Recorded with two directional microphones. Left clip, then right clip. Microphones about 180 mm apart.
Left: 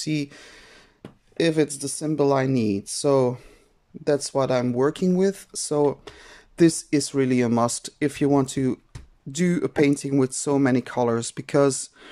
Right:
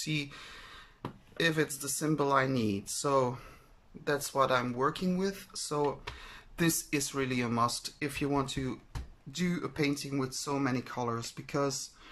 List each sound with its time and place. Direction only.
0.0 s speech: 35° left (ahead or behind)